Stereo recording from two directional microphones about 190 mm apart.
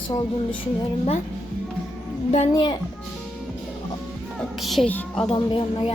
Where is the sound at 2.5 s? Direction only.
25° left (ahead or behind).